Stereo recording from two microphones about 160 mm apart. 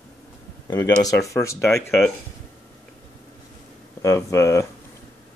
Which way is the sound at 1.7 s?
Centre (ahead or behind).